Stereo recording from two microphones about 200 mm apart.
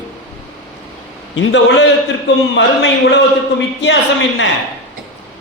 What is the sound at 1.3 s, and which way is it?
A man's voice, 65° left (ahead or behind).